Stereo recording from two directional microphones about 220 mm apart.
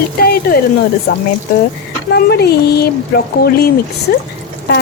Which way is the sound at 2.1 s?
50° left (ahead or behind).